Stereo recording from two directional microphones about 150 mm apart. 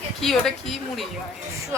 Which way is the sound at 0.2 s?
Centre (ahead or behind).